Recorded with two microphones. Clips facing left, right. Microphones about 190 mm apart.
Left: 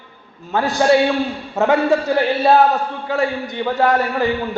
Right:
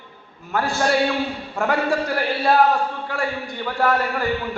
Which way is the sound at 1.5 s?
20° left (ahead or behind).